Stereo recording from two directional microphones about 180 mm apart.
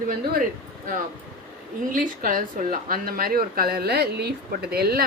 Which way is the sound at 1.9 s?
50° right (ahead or behind).